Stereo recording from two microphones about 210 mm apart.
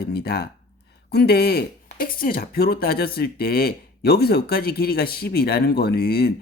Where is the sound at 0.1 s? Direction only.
50° left (ahead or behind).